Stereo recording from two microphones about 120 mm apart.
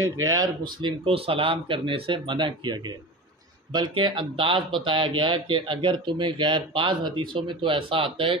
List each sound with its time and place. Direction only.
0.2 s speech: 30° right (ahead or behind)
0.7 s speech: 45° right (ahead or behind)